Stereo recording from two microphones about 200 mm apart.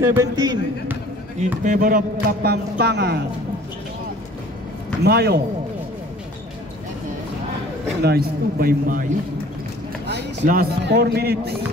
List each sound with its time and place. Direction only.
0.0 s a man's voice: 15° right (ahead or behind)
1.6 s speech: 40° right (ahead or behind)
5.0 s speech: 50° right (ahead or behind)
8.0 s speech: 50° right (ahead or behind)
10.4 s speech: 45° right (ahead or behind)